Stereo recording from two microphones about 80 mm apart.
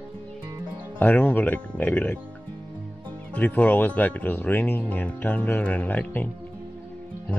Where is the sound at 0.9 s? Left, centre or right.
Centre.